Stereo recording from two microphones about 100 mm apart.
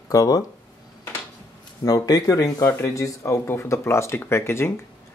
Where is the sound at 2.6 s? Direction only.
25° left (ahead or behind).